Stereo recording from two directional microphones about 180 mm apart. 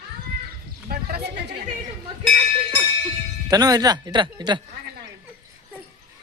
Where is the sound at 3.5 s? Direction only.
20° right (ahead or behind).